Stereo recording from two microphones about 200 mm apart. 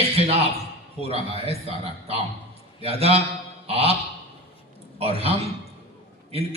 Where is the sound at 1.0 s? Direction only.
30° right (ahead or behind).